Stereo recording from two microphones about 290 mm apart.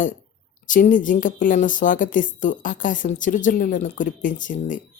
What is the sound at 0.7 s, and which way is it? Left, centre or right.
Speech, left.